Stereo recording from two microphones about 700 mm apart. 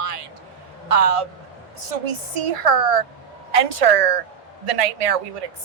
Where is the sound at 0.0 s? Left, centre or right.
Right.